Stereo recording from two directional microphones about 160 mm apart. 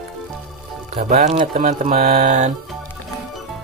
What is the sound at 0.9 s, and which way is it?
Speech, 45° right (ahead or behind).